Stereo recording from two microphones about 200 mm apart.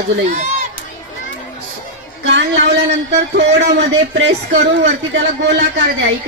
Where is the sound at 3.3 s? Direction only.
60° right (ahead or behind).